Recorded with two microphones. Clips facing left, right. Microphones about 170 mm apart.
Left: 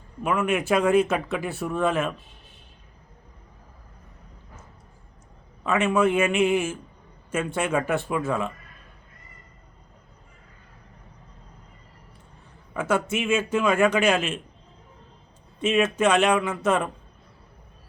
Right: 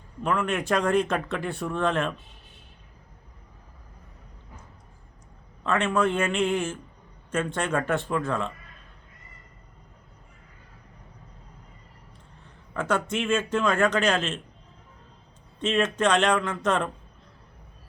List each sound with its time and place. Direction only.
0.2 s speech: 5° left (ahead or behind)
5.6 s speech: 10° left (ahead or behind)
12.7 s speech: 5° left (ahead or behind)
15.6 s speech: 10° left (ahead or behind)